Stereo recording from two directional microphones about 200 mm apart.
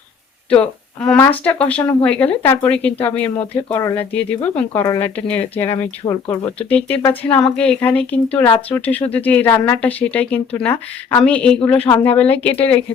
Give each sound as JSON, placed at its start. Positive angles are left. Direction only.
{"t": 0.5, "sound": "speech", "side_deg": 5}
{"t": 5.7, "sound": "speech", "side_deg": 25}
{"t": 6.6, "sound": "speech", "side_deg": 5}